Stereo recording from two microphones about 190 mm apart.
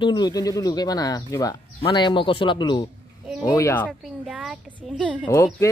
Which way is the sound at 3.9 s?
Centre (ahead or behind).